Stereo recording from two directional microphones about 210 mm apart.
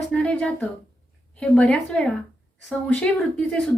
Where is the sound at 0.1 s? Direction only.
5° left (ahead or behind).